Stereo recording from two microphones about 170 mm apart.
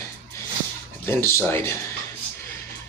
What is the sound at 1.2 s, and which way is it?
Speech, 15° left (ahead or behind).